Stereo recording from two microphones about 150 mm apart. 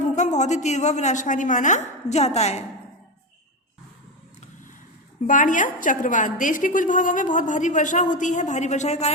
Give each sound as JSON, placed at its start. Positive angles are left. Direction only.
{"t": 0.0, "sound": "a woman's voice", "side_deg": 50}
{"t": 5.2, "sound": "a woman's voice", "side_deg": 60}